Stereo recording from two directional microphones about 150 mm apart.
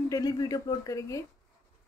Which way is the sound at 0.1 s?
25° left (ahead or behind).